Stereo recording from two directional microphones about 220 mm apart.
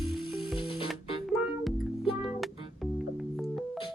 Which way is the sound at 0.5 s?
20° left (ahead or behind).